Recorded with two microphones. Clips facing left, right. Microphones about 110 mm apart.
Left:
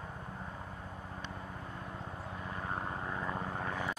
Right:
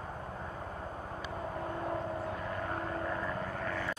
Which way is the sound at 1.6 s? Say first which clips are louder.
Right 9 dB; 60° right (ahead or behind).